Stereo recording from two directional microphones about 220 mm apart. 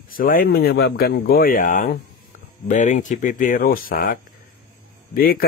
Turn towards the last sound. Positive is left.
turn(degrees=40)  # may be behind; listen again after turning